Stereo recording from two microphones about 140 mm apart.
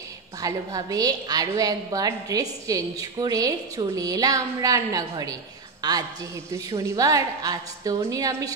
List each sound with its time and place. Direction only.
0.4 s a woman's voice: 25° right (ahead or behind)
5.8 s a sound: 30° right (ahead or behind)
6.7 s a woman's voice: 25° right (ahead or behind)